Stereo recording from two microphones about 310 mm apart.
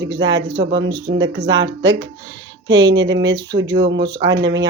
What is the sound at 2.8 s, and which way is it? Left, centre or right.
Speech, right.